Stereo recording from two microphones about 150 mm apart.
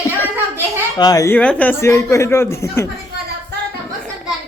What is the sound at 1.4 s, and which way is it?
Speech, 10° left (ahead or behind).